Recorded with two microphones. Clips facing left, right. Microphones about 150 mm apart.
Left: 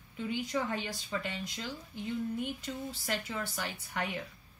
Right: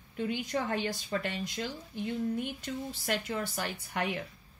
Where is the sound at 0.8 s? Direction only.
55° right (ahead or behind).